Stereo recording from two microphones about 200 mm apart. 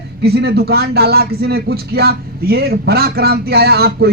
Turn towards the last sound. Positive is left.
turn(degrees=-50)  # may be behind; listen again after turning